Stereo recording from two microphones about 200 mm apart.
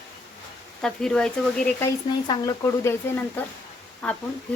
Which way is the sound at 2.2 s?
20° left (ahead or behind).